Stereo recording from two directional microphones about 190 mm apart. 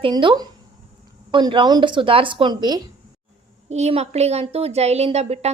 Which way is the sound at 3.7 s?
35° right (ahead or behind).